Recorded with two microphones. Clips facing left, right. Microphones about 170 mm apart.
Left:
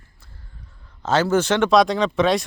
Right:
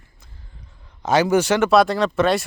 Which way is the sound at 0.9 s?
15° right (ahead or behind).